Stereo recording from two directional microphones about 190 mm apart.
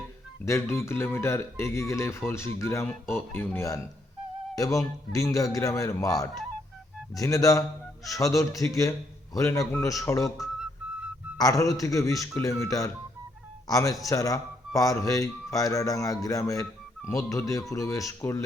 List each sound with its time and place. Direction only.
0.4 s speech: 15° left (ahead or behind)